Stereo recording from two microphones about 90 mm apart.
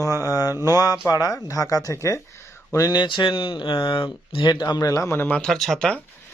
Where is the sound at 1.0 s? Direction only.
40° left (ahead or behind).